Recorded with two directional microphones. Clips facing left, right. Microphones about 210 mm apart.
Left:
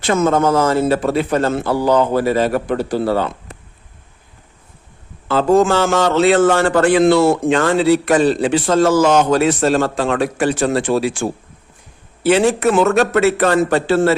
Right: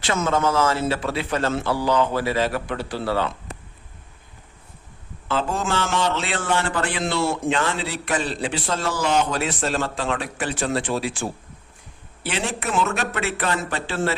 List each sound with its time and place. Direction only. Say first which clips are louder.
0.0 s a man's voice: left 7 dB; 50° left (ahead or behind)
5.3 s a man's voice: left 11 dB; 40° left (ahead or behind)